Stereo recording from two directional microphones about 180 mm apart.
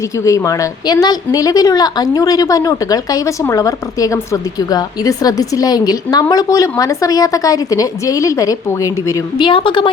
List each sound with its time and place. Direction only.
0.2 s a woman's voice: 20° left (ahead or behind)